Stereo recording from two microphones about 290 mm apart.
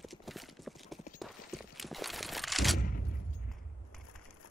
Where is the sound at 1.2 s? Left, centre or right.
Centre.